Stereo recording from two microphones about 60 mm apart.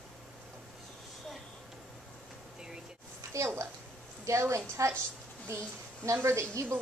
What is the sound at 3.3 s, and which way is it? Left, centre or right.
A woman's voice, right.